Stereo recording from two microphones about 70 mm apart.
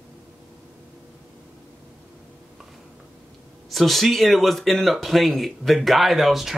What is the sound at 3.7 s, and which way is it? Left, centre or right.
Speech, centre.